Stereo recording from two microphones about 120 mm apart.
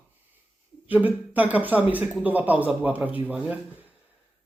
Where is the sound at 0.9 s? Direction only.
15° right (ahead or behind).